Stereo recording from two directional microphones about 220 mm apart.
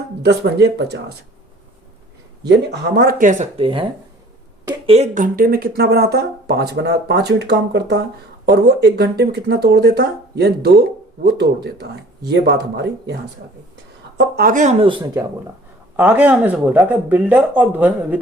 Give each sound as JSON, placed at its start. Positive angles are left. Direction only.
{"t": 0.2, "sound": "speech", "side_deg": -50}
{"t": 2.4, "sound": "speech", "side_deg": -50}
{"t": 4.9, "sound": "speech", "side_deg": -30}
{"t": 14.2, "sound": "speech", "side_deg": -45}